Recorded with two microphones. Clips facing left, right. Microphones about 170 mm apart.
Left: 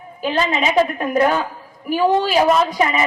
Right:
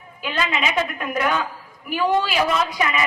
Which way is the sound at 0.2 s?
35° left (ahead or behind).